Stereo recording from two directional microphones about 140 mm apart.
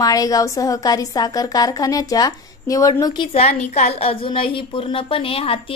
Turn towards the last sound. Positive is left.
turn(degrees=40)  # may be behind; listen again after turning